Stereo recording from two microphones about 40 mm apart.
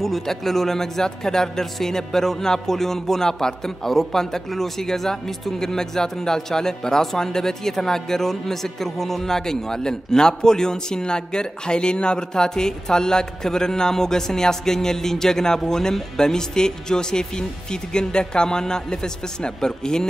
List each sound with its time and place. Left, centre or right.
0.0 s speech: centre